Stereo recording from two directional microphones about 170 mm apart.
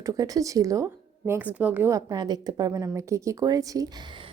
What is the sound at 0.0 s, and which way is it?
A woman's voice, 20° right (ahead or behind).